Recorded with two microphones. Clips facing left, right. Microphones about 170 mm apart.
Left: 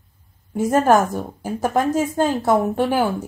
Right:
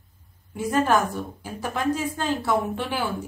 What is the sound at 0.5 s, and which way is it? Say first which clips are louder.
A woman's voice: left 6 dB; 45° left (ahead or behind).